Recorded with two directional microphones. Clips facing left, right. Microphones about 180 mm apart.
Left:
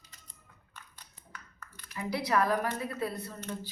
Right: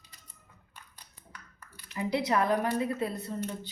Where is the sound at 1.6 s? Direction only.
10° right (ahead or behind).